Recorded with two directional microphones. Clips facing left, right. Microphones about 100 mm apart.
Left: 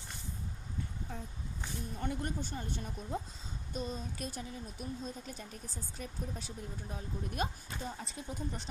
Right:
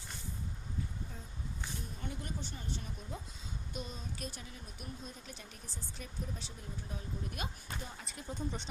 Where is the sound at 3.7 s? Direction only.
40° left (ahead or behind).